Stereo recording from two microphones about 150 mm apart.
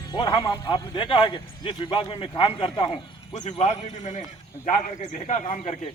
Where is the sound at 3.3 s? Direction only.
45° left (ahead or behind).